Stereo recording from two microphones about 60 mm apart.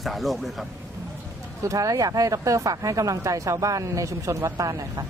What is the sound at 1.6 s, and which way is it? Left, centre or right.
Speech, right.